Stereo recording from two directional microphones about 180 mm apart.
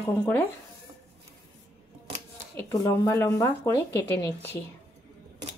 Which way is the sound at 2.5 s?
15° left (ahead or behind).